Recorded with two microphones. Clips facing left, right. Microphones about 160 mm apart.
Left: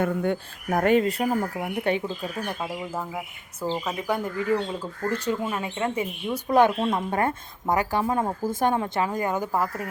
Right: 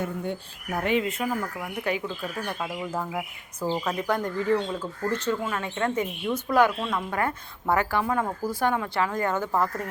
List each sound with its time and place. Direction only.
0.0 s speech: 60° left (ahead or behind)
0.7 s speech: 45° left (ahead or behind); by 2.3 s 30° left (ahead or behind)
2.6 s speech: 5° left (ahead or behind)
6.5 s a woman's voice: 20° left (ahead or behind)